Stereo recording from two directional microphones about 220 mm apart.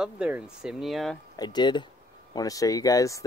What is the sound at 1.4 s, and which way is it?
Speech, 20° left (ahead or behind).